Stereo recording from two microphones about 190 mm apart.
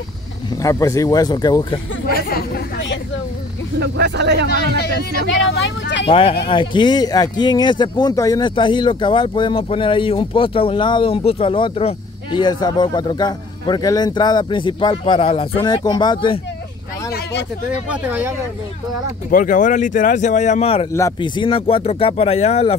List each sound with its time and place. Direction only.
0.6 s speech: 15° left (ahead or behind)
2.0 s speech: 50° left (ahead or behind)
3.8 s speech: 65° right (ahead or behind)
4.5 s speech: 55° left (ahead or behind)
6.0 s speech: 30° left (ahead or behind)
17.1 s a sound: 60° left (ahead or behind)
17.8 s speech: 5° right (ahead or behind)
19.3 s speech: 45° left (ahead or behind)
20.9 s speech: 20° left (ahead or behind)